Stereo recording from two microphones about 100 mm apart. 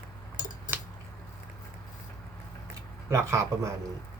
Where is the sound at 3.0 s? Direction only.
30° right (ahead or behind).